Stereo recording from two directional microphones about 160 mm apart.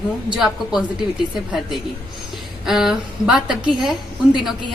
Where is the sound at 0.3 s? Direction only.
5° right (ahead or behind).